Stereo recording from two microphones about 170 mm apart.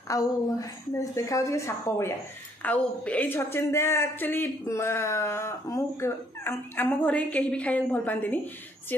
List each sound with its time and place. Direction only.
0.1 s a woman's voice: 20° left (ahead or behind)